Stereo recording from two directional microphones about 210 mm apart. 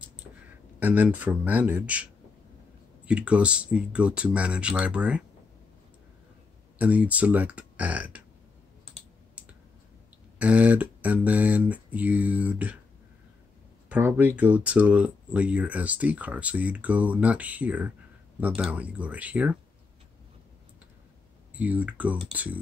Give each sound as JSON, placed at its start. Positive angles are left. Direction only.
{"t": 0.7, "sound": "speech", "side_deg": -10}
{"t": 3.1, "sound": "speech", "side_deg": -5}
{"t": 6.8, "sound": "speech", "side_deg": -5}
{"t": 10.4, "sound": "speech", "side_deg": -5}
{"t": 13.8, "sound": "speech", "side_deg": -5}
{"t": 21.5, "sound": "speech", "side_deg": -5}